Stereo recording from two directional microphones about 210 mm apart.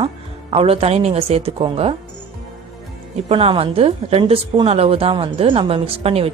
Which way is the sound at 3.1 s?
25° right (ahead or behind).